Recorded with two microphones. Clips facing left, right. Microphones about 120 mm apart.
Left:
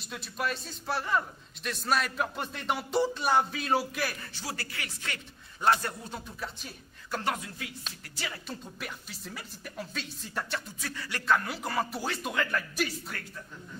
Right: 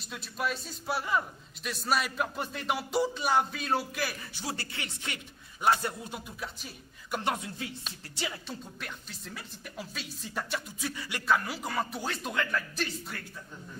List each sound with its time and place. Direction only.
0.1 s a man's voice: centre (ahead or behind)
4.4 s a man's voice: 25° right (ahead or behind)
8.5 s a man's voice: 5° left (ahead or behind); by 11.2 s 15° right (ahead or behind)
11.2 s a man's voice: 5° right (ahead or behind)